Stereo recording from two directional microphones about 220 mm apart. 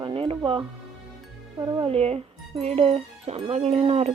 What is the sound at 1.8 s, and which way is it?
A woman's voice, 25° right (ahead or behind).